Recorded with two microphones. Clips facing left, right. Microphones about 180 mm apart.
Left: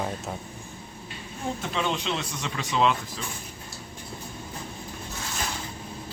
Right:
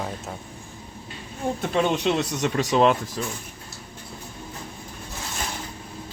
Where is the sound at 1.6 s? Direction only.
55° right (ahead or behind); by 2.5 s 70° right (ahead or behind).